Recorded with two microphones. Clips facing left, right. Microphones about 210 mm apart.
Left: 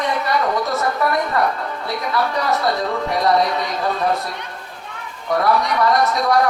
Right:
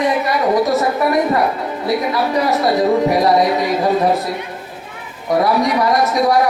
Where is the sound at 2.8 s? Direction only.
20° right (ahead or behind).